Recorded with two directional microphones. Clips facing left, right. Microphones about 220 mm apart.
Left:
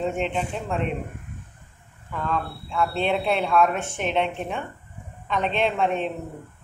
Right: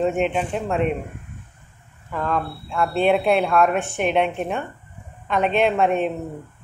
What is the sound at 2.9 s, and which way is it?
Speech, 10° right (ahead or behind).